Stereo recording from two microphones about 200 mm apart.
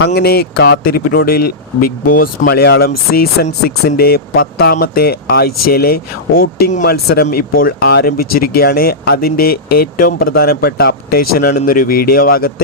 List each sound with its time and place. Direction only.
0.0 s speech: 55° left (ahead or behind)